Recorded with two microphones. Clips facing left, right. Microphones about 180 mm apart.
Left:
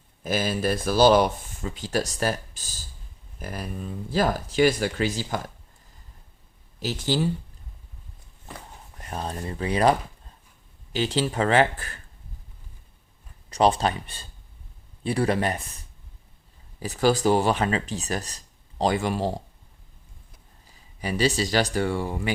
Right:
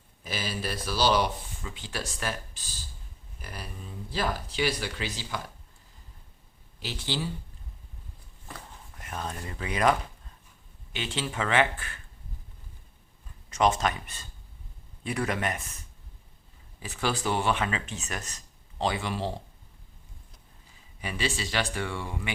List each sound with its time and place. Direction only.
0.2 s speech: 50° left (ahead or behind)
6.7 s speech: 45° left (ahead or behind)
9.0 s speech: 35° left (ahead or behind)
10.9 s speech: 35° left (ahead or behind)
13.5 s speech: 35° left (ahead or behind)
16.8 s speech: 40° left (ahead or behind)
21.0 s speech: 40° left (ahead or behind)